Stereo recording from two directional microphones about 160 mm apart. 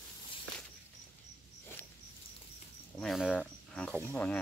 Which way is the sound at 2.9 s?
Centre (ahead or behind).